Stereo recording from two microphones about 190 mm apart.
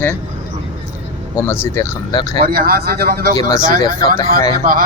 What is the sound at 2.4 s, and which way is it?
Speech, 50° right (ahead or behind).